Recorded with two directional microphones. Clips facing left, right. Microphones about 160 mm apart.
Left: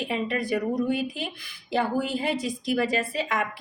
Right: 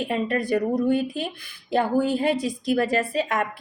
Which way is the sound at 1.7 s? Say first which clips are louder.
Right 4 dB; 50° right (ahead or behind).